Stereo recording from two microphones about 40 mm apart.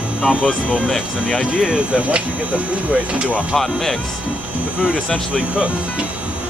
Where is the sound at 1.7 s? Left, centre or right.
Right.